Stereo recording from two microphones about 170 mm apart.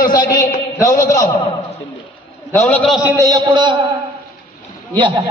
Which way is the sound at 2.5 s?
15° left (ahead or behind).